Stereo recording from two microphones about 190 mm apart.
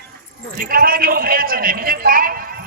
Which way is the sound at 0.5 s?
50° right (ahead or behind).